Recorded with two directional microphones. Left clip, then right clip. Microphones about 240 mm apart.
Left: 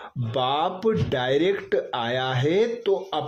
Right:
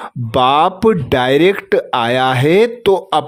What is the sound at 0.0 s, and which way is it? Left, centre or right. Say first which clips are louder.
Speech: right 12 dB; right.